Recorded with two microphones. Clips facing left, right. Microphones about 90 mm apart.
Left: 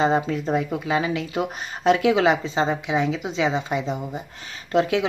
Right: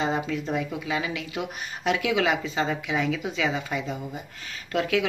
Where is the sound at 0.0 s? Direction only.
40° left (ahead or behind).